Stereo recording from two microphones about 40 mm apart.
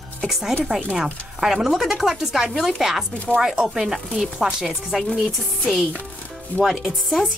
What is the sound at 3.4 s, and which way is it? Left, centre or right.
Speech, right.